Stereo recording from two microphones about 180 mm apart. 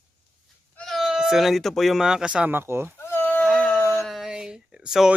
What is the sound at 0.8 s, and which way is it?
Speech, centre (ahead or behind).